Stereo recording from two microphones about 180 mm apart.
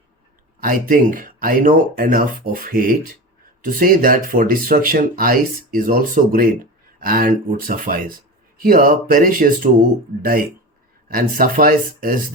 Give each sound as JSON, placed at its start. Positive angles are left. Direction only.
{"t": 0.6, "sound": "speech", "side_deg": -50}
{"t": 11.1, "sound": "speech", "side_deg": -50}